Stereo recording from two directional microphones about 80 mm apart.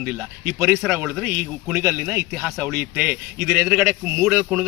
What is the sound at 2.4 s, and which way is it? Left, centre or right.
Speech, centre.